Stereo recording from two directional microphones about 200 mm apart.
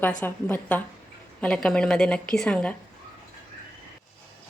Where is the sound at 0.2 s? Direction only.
10° left (ahead or behind).